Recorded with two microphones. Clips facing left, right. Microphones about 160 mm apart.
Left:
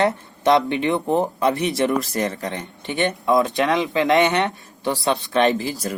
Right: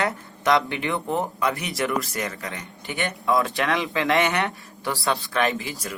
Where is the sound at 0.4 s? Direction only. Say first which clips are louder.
Left 5 dB; 25° left (ahead or behind).